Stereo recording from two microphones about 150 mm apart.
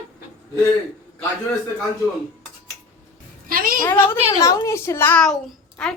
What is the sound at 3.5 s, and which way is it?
Speech, 70° right (ahead or behind).